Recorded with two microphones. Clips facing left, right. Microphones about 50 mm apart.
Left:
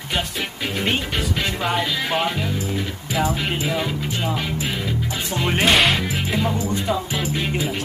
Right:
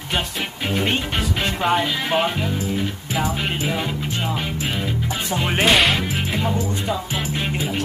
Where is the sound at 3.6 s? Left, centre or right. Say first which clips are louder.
Even; centre.